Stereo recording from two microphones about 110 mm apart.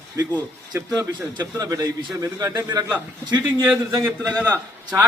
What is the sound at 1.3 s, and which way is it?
A man's voice, 35° right (ahead or behind).